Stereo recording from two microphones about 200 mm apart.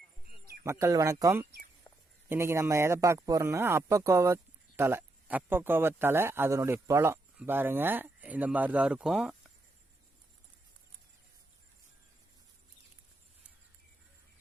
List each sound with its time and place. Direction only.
0.6 s speech: 15° right (ahead or behind)
1.9 s a sound: 20° left (ahead or behind)
2.3 s speech: 15° right (ahead or behind)